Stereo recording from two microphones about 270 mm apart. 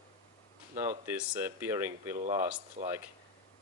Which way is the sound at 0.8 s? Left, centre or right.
Centre.